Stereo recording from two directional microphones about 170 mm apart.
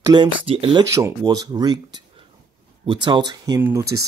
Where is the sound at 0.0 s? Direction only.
25° right (ahead or behind).